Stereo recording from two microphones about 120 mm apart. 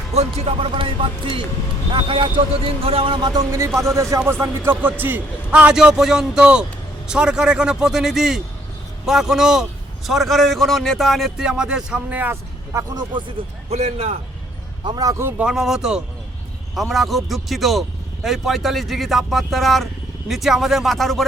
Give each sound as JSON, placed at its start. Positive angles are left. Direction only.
{"t": 0.1, "sound": "speech", "side_deg": -60}
{"t": 3.8, "sound": "a man's voice", "side_deg": -25}
{"t": 12.9, "sound": "speech", "side_deg": -40}
{"t": 13.7, "sound": "a man's voice", "side_deg": -60}
{"t": 14.8, "sound": "speech", "side_deg": -35}
{"t": 15.4, "sound": "speech", "side_deg": -5}